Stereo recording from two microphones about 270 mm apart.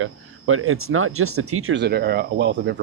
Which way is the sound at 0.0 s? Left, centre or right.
Right.